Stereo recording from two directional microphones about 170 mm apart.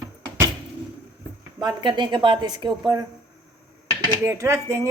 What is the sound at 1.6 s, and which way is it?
Speech, 25° right (ahead or behind).